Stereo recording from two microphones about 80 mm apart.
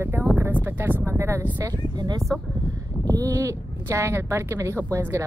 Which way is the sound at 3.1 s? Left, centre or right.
Right.